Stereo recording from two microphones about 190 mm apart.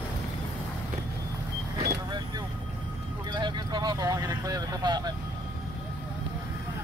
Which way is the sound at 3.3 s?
25° right (ahead or behind).